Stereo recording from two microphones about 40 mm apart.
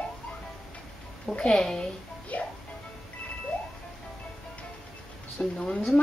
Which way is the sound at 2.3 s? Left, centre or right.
Left.